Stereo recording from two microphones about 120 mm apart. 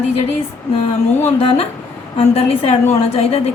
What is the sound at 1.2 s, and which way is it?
A woman's voice, 60° left (ahead or behind).